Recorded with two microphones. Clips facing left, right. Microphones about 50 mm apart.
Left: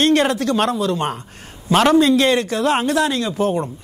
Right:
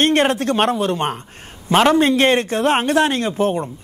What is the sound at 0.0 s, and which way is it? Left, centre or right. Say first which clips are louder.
A man's voice: even; right.